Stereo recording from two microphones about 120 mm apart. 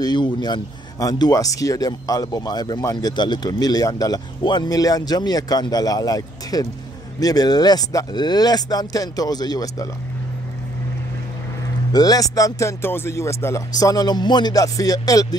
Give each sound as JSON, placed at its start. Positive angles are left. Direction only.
{"t": 0.0, "sound": "speech", "side_deg": 35}
{"t": 11.9, "sound": "speech", "side_deg": 30}